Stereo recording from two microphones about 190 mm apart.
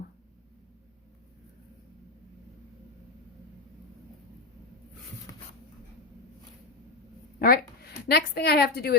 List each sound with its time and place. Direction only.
7.3 s a woman's voice: 50° left (ahead or behind)